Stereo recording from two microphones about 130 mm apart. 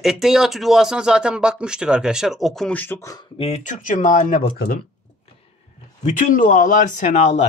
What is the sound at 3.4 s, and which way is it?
Speech, 60° left (ahead or behind).